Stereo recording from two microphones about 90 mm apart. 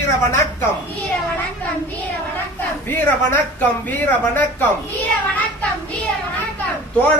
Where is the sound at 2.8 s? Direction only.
20° left (ahead or behind).